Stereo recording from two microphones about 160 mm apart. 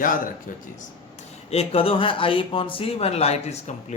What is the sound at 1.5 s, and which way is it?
A man's voice, 40° left (ahead or behind).